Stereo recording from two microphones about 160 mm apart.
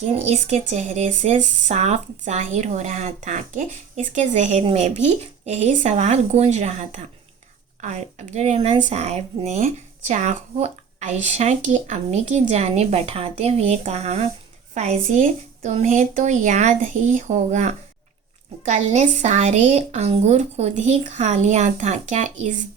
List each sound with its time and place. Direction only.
0.1 s speech: 45° right (ahead or behind)